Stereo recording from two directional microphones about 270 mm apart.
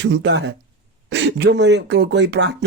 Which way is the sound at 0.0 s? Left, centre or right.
Right.